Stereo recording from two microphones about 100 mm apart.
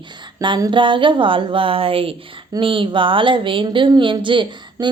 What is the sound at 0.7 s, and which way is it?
A woman's voice, 55° right (ahead or behind).